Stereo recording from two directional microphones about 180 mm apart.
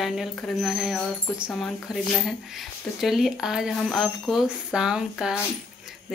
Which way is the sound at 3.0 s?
Centre (ahead or behind).